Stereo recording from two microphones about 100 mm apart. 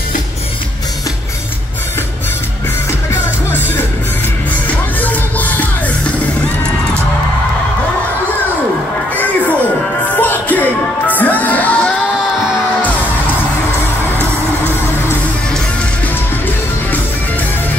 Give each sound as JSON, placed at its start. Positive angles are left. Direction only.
{"t": 3.1, "sound": "music", "side_deg": 20}
{"t": 9.1, "sound": "a sound", "side_deg": 15}
{"t": 10.0, "sound": "music", "side_deg": 15}
{"t": 14.1, "sound": "music", "side_deg": -20}